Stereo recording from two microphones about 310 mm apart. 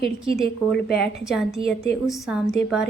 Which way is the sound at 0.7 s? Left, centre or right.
Left.